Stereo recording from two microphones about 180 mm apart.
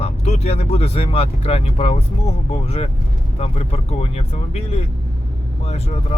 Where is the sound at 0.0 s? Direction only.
35° left (ahead or behind).